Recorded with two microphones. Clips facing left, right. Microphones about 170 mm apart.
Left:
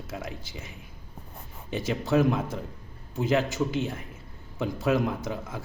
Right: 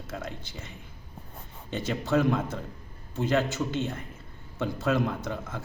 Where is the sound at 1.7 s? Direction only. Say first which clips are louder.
Left 1 dB; 15° left (ahead or behind).